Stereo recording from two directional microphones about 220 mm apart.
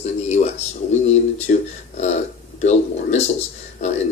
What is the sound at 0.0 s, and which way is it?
Speech, 30° left (ahead or behind).